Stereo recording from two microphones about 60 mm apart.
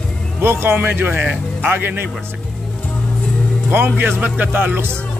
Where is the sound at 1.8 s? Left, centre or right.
Right.